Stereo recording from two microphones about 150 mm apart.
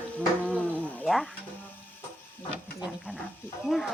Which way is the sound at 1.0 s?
Centre (ahead or behind).